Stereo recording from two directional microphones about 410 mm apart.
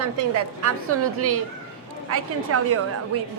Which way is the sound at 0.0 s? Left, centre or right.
Right.